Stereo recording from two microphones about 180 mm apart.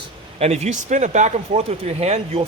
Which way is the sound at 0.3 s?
40° right (ahead or behind).